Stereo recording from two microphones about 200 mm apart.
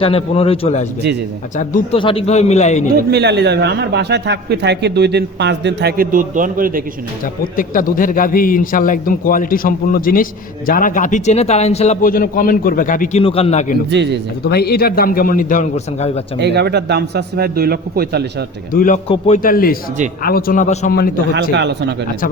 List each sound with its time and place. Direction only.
0.0 s a man's voice: 30° left (ahead or behind)
2.0 s a man's voice: 25° left (ahead or behind)
3.1 s a man's voice: 55° right (ahead or behind)
7.4 s a man's voice: 45° left (ahead or behind)
12.0 s a man's voice: 45° left (ahead or behind)
13.2 s a man's voice: 30° left (ahead or behind)
13.9 s a man's voice: 60° right (ahead or behind)
14.4 s a man's voice: 50° left (ahead or behind); by 16.2 s 30° left (ahead or behind)
16.4 s a man's voice: 55° right (ahead or behind)
18.7 s a man's voice: 45° left (ahead or behind)
19.0 s a man's voice: 30° left (ahead or behind)
19.4 s a man's voice: 45° left (ahead or behind)
21.5 s a man's voice: 60° right (ahead or behind)